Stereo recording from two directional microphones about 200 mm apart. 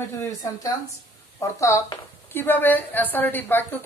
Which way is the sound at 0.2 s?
15° left (ahead or behind).